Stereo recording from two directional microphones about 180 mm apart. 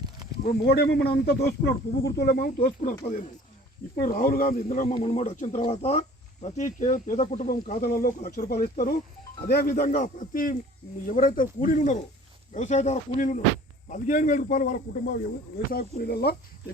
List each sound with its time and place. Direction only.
0.6 s speech: 60° left (ahead or behind)
3.9 s speech: 55° left (ahead or behind)
4.9 s speech: 40° left (ahead or behind)
7.8 s speech: 55° left (ahead or behind)